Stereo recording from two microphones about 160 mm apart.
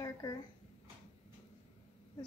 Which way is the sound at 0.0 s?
25° left (ahead or behind).